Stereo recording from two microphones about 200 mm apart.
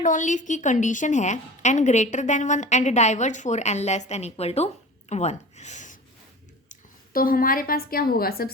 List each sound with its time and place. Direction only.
0.0 s a woman's voice: 40° left (ahead or behind)